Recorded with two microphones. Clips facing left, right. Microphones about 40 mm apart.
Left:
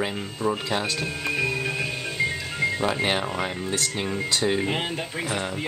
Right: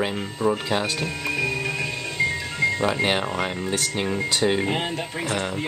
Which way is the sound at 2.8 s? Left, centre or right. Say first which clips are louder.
Right 2 dB; centre.